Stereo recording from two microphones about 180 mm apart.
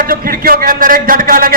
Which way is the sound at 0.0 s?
55° right (ahead or behind).